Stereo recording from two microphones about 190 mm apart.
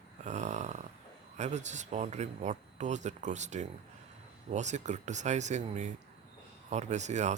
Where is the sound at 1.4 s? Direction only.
35° right (ahead or behind).